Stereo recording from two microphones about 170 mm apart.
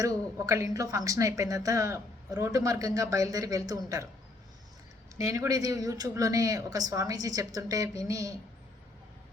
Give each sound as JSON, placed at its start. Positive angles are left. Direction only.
{"t": 0.0, "sound": "a woman's voice", "side_deg": -20}
{"t": 5.1, "sound": "a woman's voice", "side_deg": -20}